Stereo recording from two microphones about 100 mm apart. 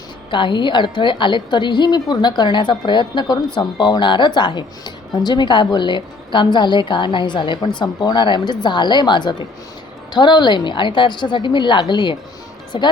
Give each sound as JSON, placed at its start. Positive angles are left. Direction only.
{"t": 0.3, "sound": "a woman's voice", "side_deg": 55}